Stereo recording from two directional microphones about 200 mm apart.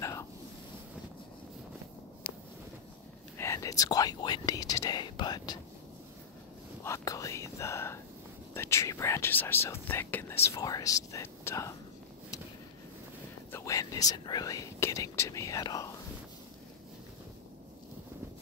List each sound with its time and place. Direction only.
0.0 s ocean: 15° left (ahead or behind)
3.3 s speech: 15° left (ahead or behind)
6.8 s speech: 15° left (ahead or behind)
13.5 s speech: 15° left (ahead or behind)